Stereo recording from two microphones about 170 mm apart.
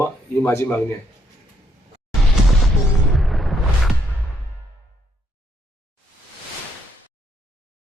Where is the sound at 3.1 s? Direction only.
Centre (ahead or behind).